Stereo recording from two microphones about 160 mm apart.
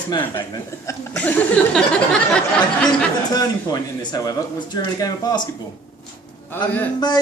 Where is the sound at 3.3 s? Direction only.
25° left (ahead or behind).